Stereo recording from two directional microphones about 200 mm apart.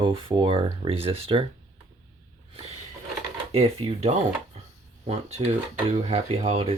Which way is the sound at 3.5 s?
30° right (ahead or behind).